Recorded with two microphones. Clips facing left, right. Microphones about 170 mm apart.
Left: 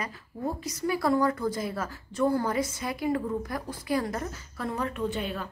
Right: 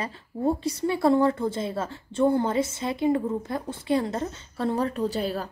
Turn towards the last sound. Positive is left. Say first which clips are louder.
# right 4 dB
turn(degrees=-35)  # may be behind; listen again after turning